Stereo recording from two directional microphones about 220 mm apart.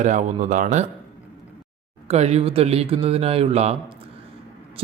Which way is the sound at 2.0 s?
30° right (ahead or behind).